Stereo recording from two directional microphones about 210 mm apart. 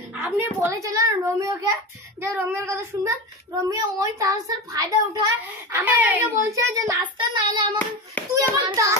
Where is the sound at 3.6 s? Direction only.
15° right (ahead or behind).